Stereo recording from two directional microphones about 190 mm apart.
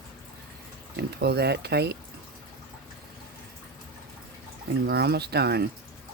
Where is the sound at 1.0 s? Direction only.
60° right (ahead or behind).